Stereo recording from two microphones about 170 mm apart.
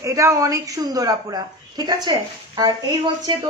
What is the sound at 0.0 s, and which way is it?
A woman's voice, 15° right (ahead or behind).